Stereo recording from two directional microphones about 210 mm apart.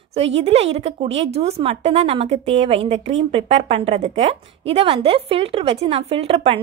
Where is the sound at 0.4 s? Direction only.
30° right (ahead or behind).